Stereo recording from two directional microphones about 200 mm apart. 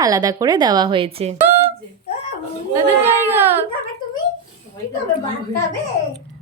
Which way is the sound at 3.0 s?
10° right (ahead or behind).